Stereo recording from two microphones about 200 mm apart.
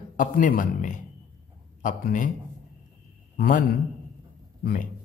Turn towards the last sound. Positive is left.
turn(degrees=45)  # may be behind; listen again after turning